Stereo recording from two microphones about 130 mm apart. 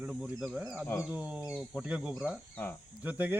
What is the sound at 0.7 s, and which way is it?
Speech, 20° left (ahead or behind).